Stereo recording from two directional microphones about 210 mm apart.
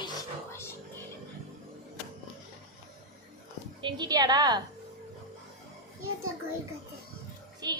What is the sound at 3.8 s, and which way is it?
Speech, 20° right (ahead or behind).